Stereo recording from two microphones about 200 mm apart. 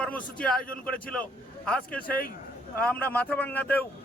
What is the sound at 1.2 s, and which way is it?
A man's voice, 5° left (ahead or behind).